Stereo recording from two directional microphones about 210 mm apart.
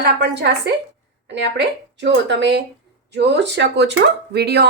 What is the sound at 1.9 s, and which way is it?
A woman's voice, 60° right (ahead or behind).